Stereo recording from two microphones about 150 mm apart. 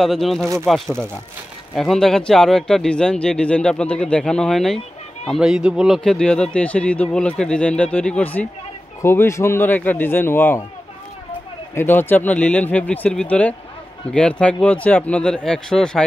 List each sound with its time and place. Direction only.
0.0 s speech: centre (ahead or behind)
5.9 s speech: 5° left (ahead or behind)
11.7 s speech: 15° left (ahead or behind)